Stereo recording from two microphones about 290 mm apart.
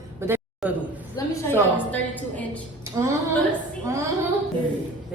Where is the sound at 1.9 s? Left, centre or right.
Centre.